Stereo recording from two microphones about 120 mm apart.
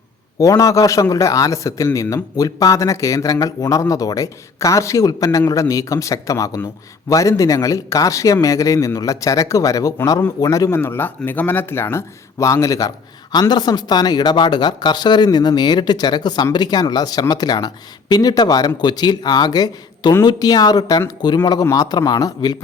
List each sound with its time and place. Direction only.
0.3 s speech: 30° left (ahead or behind)